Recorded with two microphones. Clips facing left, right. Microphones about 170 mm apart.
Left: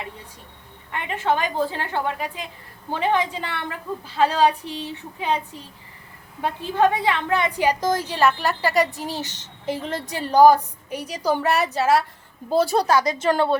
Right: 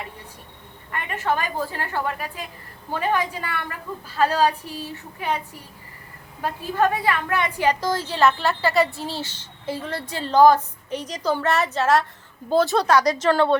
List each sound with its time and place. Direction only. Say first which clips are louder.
0.9 s a woman's voice: left 2 dB; 15° left (ahead or behind)
6.4 s a woman's voice: left 2 dB; 20° left (ahead or behind)